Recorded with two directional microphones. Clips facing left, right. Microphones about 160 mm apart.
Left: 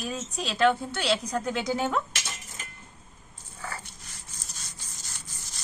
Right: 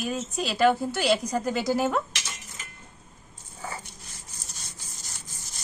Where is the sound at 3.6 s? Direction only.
15° right (ahead or behind).